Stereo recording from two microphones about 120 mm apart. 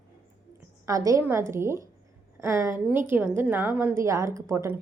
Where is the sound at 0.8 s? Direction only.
30° right (ahead or behind).